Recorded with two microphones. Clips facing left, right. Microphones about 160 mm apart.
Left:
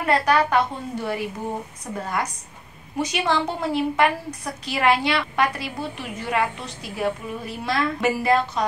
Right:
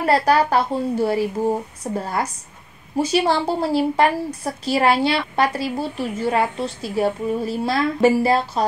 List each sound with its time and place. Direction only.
0.0 s a woman's voice: 35° right (ahead or behind)